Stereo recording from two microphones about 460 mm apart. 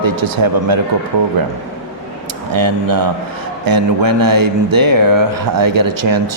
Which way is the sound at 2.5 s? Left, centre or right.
Right.